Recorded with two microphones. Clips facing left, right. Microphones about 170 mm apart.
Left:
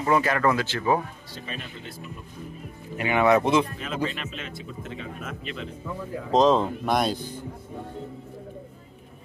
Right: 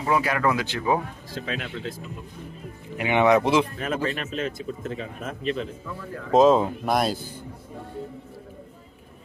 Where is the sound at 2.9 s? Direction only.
15° right (ahead or behind).